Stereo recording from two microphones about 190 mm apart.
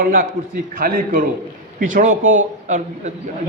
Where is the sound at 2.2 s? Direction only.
90° right.